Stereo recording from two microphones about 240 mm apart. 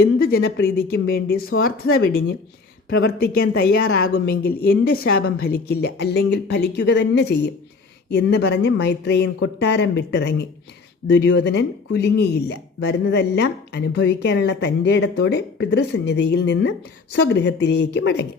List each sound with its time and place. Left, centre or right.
0.0 s a woman's voice: left
2.9 s a woman's voice: left